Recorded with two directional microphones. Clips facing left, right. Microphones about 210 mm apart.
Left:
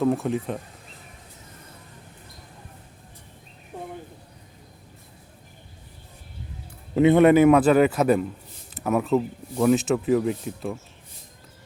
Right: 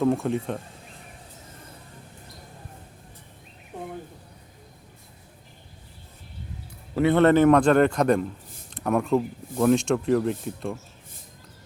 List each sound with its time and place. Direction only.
0.0 s speech: centre (ahead or behind)
6.9 s a man's voice: 15° left (ahead or behind)